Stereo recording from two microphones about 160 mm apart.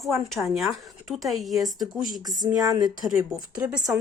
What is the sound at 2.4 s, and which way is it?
Speech, 20° right (ahead or behind).